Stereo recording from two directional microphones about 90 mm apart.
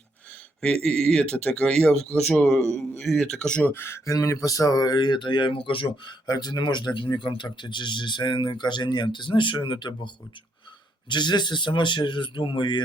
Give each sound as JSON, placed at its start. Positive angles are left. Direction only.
{"t": 0.6, "sound": "a man's voice", "side_deg": 10}
{"t": 3.7, "sound": "speech", "side_deg": 25}
{"t": 6.2, "sound": "speech", "side_deg": 50}
{"t": 11.1, "sound": "speech", "side_deg": 55}